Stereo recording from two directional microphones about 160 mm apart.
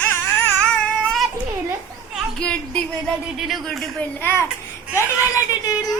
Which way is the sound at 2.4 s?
5° left (ahead or behind).